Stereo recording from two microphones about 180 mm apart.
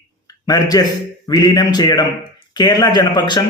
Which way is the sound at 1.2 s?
20° left (ahead or behind).